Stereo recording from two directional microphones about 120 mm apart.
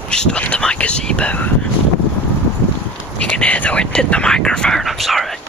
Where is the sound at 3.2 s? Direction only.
10° left (ahead or behind).